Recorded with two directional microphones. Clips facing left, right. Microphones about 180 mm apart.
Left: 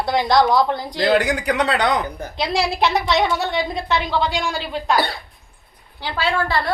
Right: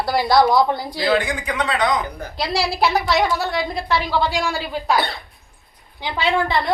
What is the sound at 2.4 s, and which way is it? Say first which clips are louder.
A woman's voice: left 1 dB; centre (ahead or behind).